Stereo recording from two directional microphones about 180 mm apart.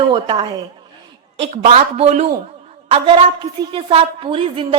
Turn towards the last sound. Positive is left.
turn(degrees=-30)  # may be behind; listen again after turning